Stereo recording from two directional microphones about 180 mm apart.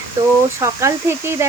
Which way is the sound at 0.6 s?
15° right (ahead or behind).